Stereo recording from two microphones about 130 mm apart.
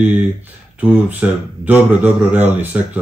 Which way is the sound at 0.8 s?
10° right (ahead or behind).